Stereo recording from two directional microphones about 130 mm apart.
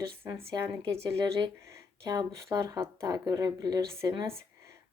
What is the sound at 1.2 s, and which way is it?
Speech, 30° right (ahead or behind).